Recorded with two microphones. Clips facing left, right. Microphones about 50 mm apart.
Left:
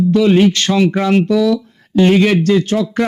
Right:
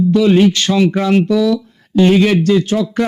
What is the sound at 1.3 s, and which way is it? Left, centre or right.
Speech, left.